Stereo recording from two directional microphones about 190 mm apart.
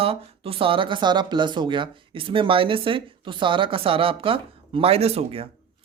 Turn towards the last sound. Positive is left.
turn(degrees=-30)  # may be behind; listen again after turning